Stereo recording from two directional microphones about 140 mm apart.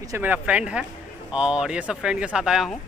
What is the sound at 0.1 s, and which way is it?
Speech, 10° right (ahead or behind).